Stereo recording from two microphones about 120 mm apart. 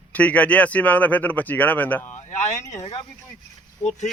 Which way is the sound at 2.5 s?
25° left (ahead or behind).